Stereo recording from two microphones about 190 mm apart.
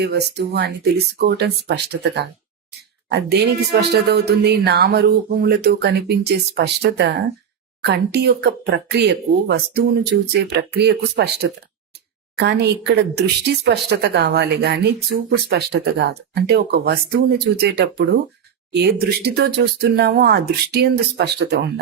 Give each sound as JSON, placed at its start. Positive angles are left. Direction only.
{"t": 0.0, "sound": "speech", "side_deg": -60}